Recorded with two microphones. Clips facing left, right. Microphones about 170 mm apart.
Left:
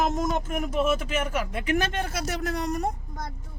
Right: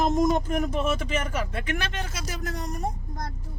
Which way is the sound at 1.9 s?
55° left (ahead or behind).